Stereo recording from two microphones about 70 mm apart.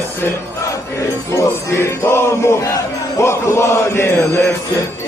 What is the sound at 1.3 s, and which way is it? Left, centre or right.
Chant, left.